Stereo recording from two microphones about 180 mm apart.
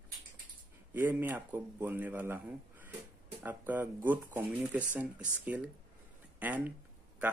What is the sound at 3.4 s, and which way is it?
Speech, 10° right (ahead or behind).